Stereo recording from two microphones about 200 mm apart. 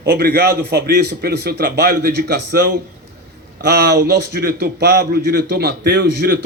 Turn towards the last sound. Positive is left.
turn(degrees=-50)  # may be behind; listen again after turning